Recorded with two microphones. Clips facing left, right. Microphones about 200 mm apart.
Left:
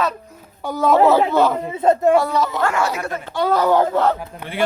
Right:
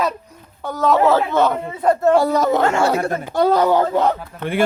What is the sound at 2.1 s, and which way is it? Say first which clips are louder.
Speech: right 2 dB; 40° right (ahead or behind).